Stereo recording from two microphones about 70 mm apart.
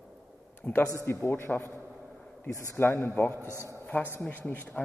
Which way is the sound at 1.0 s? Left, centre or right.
Left.